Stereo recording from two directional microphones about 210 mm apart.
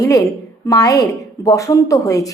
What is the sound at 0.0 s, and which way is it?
A woman's voice, 15° left (ahead or behind).